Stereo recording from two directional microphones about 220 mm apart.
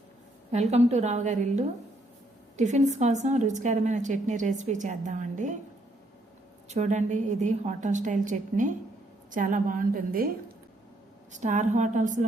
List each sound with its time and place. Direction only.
0.5 s a woman's voice: 30° right (ahead or behind)
6.7 s a woman's voice: 30° right (ahead or behind)